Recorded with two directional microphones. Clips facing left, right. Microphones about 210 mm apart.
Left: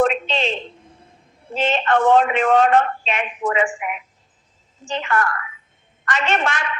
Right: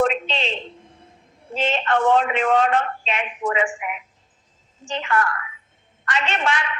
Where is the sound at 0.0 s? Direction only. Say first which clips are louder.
Left 2 dB; 45° left (ahead or behind).